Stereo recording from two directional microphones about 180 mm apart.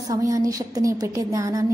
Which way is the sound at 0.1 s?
20° right (ahead or behind).